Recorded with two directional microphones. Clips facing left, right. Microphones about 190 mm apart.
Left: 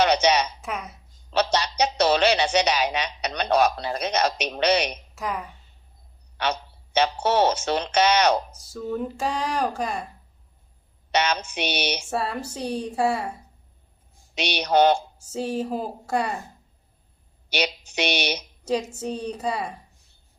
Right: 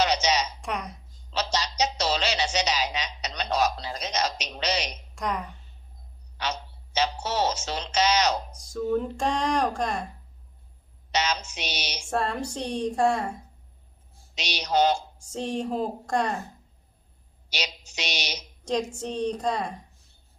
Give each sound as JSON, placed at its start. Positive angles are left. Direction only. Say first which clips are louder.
{"t": 0.0, "sound": "a sound", "louder": "left 5 dB", "side_deg": 60}
{"t": 0.6, "sound": "speech", "louder": "even", "side_deg": 5}
{"t": 1.3, "sound": "speech", "louder": "left 6 dB", "side_deg": 60}
{"t": 5.1, "sound": "speech", "louder": "right 3 dB", "side_deg": 5}
{"t": 6.3, "sound": "speech", "louder": "left 5 dB", "side_deg": 60}
{"t": 8.4, "sound": "speech", "louder": "right 3 dB", "side_deg": 5}
{"t": 11.1, "sound": "speech", "louder": "left 4 dB", "side_deg": 60}
{"t": 12.1, "sound": "a woman's voice", "louder": "even", "side_deg": 5}
{"t": 14.3, "sound": "speech", "louder": "left 4 dB", "side_deg": 60}
{"t": 15.2, "sound": "speech", "louder": "left 2 dB", "side_deg": 5}
{"t": 17.5, "sound": "speech", "louder": "left 8 dB", "side_deg": 60}
{"t": 18.6, "sound": "a woman's voice", "louder": "left 1 dB", "side_deg": 5}